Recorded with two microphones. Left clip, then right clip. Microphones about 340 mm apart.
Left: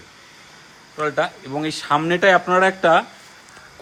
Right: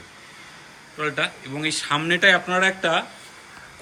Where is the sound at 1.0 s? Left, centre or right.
Centre.